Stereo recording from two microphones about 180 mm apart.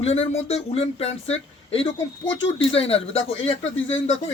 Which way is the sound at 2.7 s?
35° left (ahead or behind).